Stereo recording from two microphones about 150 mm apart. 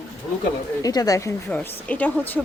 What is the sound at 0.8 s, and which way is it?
Speech, 25° left (ahead or behind).